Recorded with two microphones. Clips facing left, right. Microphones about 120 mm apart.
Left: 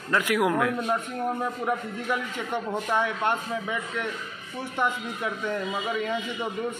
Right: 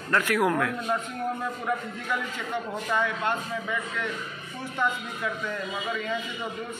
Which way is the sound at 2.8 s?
15° left (ahead or behind).